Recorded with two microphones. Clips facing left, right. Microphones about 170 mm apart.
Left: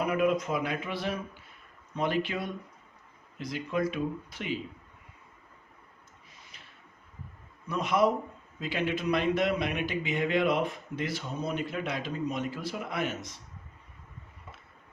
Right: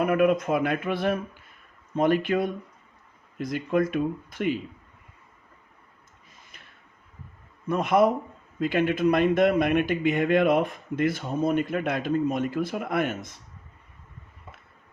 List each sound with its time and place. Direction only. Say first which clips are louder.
0.0 s a man's voice: right 5 dB; 55° right (ahead or behind)
7.7 s a man's voice: right 5 dB; 50° right (ahead or behind)